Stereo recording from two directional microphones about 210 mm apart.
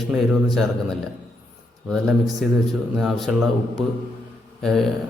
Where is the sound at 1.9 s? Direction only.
Centre (ahead or behind).